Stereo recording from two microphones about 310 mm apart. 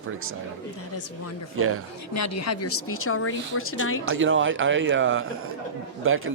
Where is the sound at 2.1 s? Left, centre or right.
Left.